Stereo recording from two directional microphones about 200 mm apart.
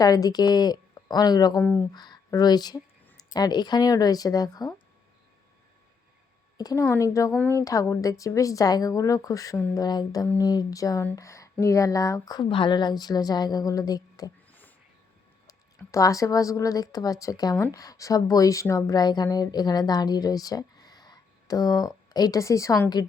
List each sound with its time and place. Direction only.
0.0 s speech: 20° left (ahead or behind)
6.6 s speech: 15° left (ahead or behind)